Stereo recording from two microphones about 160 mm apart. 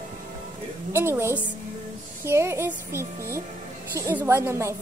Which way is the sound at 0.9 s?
15° right (ahead or behind).